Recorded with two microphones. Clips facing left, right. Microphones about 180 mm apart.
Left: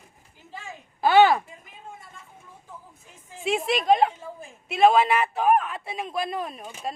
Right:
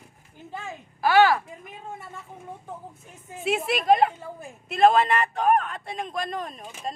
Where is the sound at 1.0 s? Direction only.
20° left (ahead or behind).